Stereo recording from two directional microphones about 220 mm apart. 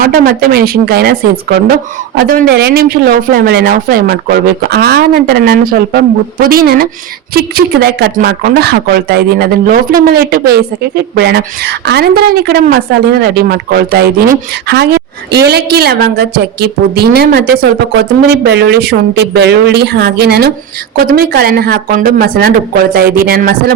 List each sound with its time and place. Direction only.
0.0 s speech: 40° right (ahead or behind)